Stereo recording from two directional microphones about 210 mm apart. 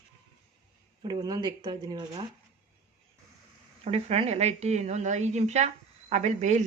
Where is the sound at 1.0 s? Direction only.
20° right (ahead or behind).